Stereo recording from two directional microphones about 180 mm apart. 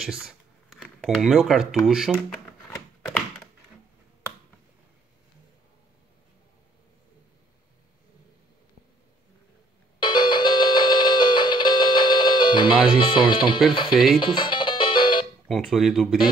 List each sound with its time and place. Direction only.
0.0 s a sound: 5° right (ahead or behind)
1.9 s speech: 5° right (ahead or behind)
2.1 s drawer open or close: 10° left (ahead or behind)
3.1 s computer keyboard: 5° left (ahead or behind)
9.9 s music: 25° left (ahead or behind)
13.0 s speech: 25° left (ahead or behind)
13.9 s speech: centre (ahead or behind)
14.2 s music: 25° left (ahead or behind)
15.4 s speech: centre (ahead or behind)